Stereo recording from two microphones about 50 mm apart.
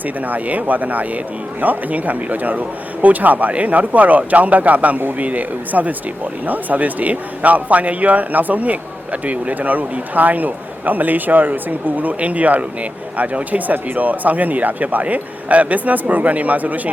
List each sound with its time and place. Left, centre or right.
0.3 s speech: right